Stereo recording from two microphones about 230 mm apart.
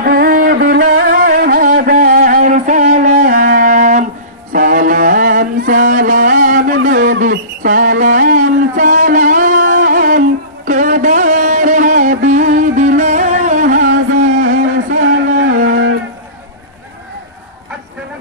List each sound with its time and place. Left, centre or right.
0.0 s music: right